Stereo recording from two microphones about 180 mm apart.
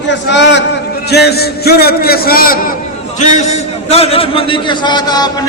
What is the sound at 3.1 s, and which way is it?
A man's voice, 40° left (ahead or behind).